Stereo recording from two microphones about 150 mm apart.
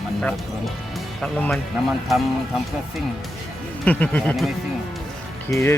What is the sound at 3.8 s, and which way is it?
Speech, 10° left (ahead or behind).